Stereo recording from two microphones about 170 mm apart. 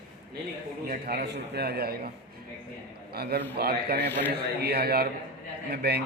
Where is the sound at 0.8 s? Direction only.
55° right (ahead or behind).